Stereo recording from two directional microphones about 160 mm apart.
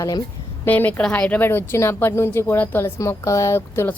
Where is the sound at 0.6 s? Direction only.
10° left (ahead or behind).